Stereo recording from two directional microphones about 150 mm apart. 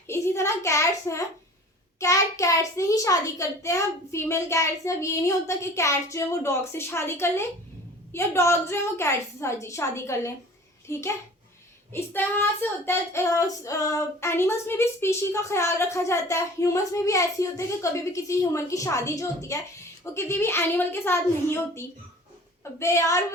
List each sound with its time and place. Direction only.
0.1 s a child's voice: 20° left (ahead or behind)